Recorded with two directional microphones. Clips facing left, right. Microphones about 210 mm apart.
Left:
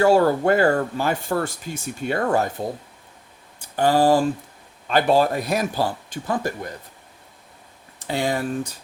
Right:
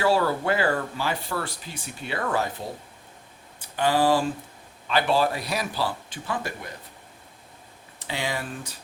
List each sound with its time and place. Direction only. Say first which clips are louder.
0.0 s speech: left 6 dB; 45° left (ahead or behind)
3.8 s speech: left 4 dB; 45° left (ahead or behind)
8.0 s speech: left 7 dB; 50° left (ahead or behind)